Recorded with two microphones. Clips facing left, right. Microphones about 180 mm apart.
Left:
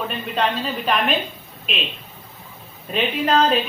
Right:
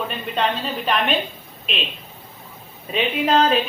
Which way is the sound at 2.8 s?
Centre (ahead or behind).